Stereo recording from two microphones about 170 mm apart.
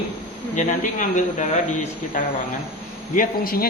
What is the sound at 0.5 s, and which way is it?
Speech, 45° left (ahead or behind).